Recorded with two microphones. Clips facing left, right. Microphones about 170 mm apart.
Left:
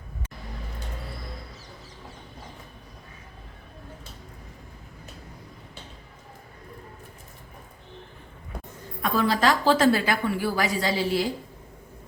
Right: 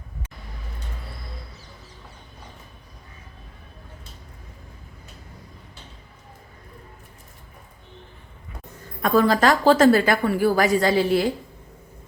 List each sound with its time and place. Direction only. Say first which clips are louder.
9.0 s a woman's voice: right 5 dB; 45° right (ahead or behind)